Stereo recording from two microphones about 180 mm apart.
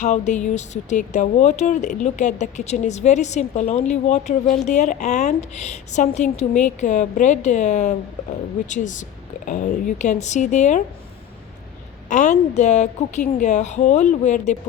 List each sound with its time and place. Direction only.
0.0 s speech: 40° left (ahead or behind)
12.0 s speech: 40° left (ahead or behind)